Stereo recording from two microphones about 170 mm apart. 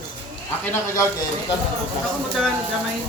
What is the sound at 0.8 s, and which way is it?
Speech, 15° left (ahead or behind).